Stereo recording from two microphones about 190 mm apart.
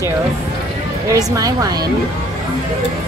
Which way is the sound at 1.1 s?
20° right (ahead or behind).